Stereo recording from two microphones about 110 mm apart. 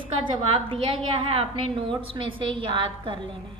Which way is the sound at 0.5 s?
60° right (ahead or behind).